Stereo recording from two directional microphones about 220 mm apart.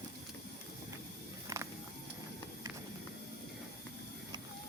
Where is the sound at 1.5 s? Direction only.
15° right (ahead or behind).